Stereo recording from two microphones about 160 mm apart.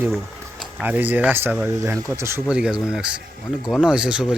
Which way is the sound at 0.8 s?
10° right (ahead or behind).